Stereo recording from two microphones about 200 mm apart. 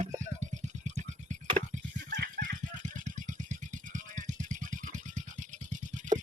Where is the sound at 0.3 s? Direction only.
35° right (ahead or behind).